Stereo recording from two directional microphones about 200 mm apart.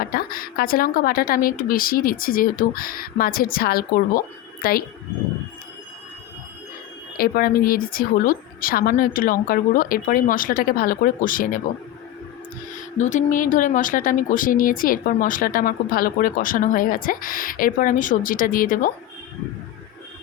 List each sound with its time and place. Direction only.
0.0 s speech: 45° left (ahead or behind)
7.2 s speech: 45° left (ahead or behind)
13.0 s speech: 40° left (ahead or behind)